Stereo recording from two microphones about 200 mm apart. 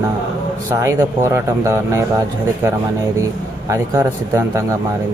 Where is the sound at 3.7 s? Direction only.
15° right (ahead or behind).